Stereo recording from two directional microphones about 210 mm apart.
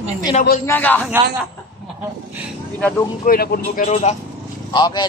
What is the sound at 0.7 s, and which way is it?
Speech, 10° left (ahead or behind).